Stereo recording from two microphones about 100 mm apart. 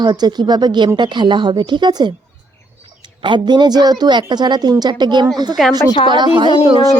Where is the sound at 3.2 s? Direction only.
50° right (ahead or behind).